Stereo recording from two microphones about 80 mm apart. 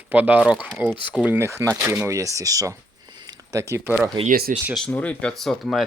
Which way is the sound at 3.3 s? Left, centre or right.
Right.